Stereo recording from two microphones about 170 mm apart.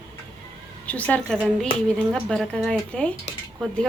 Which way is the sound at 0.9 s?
10° left (ahead or behind).